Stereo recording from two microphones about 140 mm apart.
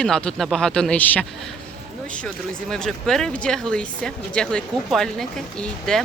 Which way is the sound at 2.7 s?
5° left (ahead or behind).